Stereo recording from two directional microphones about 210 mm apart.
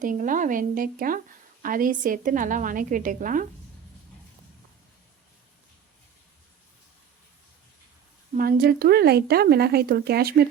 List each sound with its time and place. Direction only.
0.0 s a woman's voice: 40° right (ahead or behind)
8.3 s speech: 45° right (ahead or behind)